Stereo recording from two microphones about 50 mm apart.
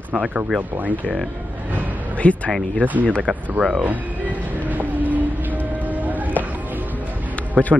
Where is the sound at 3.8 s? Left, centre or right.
Right.